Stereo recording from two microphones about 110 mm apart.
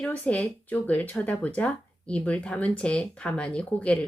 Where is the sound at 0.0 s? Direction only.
10° left (ahead or behind).